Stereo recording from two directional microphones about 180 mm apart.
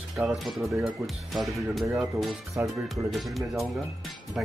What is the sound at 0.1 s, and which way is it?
Speech, centre (ahead or behind).